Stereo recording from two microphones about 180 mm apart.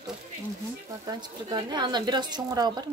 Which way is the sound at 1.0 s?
25° right (ahead or behind).